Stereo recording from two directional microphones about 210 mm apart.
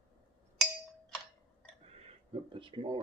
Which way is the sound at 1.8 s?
30° right (ahead or behind).